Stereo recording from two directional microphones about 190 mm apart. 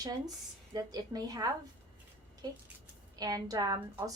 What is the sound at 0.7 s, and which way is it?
A woman's voice, 20° right (ahead or behind).